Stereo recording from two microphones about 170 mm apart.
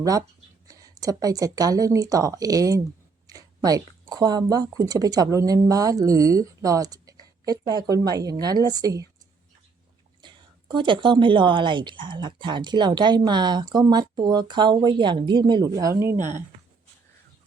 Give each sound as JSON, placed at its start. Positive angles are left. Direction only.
{"t": 0.0, "sound": "a woman's voice", "side_deg": -20}
{"t": 10.2, "sound": "a woman's voice", "side_deg": -25}
{"t": 16.1, "sound": "speech", "side_deg": -45}